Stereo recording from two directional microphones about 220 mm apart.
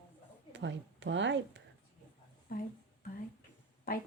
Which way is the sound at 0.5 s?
55° right (ahead or behind).